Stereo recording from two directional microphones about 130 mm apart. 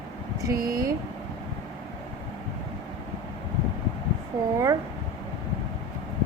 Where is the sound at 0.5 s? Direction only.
90° right.